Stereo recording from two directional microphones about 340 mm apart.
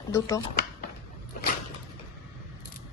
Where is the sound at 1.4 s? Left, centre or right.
Left.